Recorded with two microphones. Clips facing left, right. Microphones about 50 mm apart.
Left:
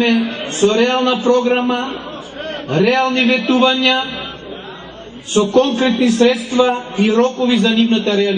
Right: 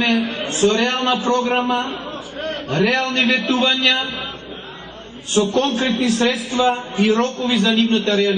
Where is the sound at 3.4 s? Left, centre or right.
Left.